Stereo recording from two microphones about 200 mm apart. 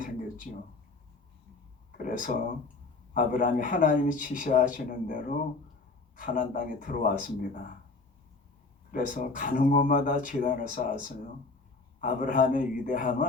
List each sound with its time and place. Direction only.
2.0 s speech: 40° left (ahead or behind)
8.9 s speech: 40° left (ahead or behind)
11.9 s speech: 40° left (ahead or behind)